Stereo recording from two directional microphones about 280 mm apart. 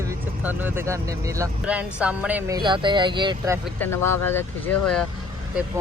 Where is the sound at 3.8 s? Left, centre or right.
Centre.